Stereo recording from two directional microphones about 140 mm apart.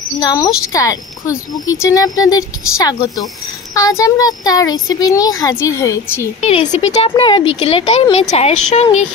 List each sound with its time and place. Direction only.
0.2 s a child's voice: 30° left (ahead or behind)
6.4 s speech: 55° left (ahead or behind)
7.2 s speech: 40° left (ahead or behind)